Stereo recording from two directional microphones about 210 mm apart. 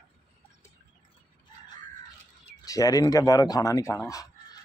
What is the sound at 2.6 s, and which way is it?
Speech, 15° left (ahead or behind).